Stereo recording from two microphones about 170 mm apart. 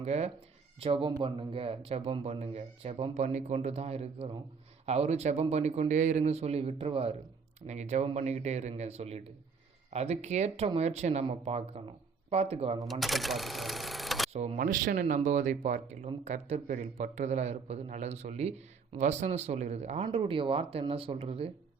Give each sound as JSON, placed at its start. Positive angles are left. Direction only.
{"t": 0.0, "sound": "speech", "side_deg": -40}
{"t": 12.8, "sound": "cash register", "side_deg": 0}
{"t": 14.3, "sound": "speech", "side_deg": -40}
{"t": 14.6, "sound": "speech", "side_deg": -55}
{"t": 15.0, "sound": "speech", "side_deg": -45}